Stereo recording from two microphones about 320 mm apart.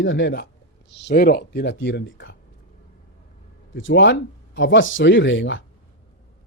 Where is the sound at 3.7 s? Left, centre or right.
Left.